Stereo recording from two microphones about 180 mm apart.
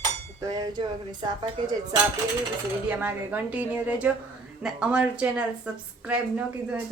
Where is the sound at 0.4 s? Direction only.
20° right (ahead or behind).